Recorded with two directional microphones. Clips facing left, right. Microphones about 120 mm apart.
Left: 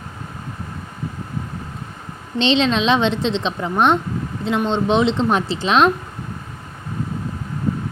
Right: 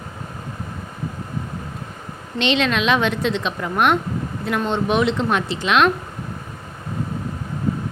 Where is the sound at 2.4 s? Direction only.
30° left (ahead or behind).